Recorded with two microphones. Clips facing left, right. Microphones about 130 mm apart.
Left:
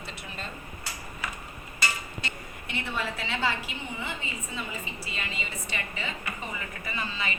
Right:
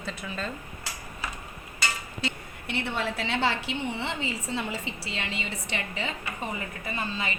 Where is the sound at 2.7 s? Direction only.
65° right (ahead or behind).